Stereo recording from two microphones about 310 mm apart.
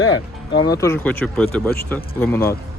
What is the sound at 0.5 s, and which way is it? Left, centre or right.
Speech, centre.